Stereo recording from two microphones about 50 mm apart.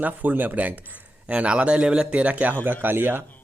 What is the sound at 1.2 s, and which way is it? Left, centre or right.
Speech, right.